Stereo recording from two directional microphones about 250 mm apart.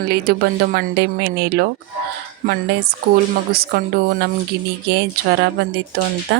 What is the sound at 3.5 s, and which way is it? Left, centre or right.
Speech, right.